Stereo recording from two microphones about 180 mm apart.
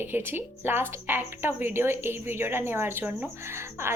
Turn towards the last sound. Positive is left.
turn(degrees=-15)  # may be behind; listen again after turning